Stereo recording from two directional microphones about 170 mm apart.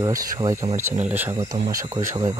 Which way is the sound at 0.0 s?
20° right (ahead or behind).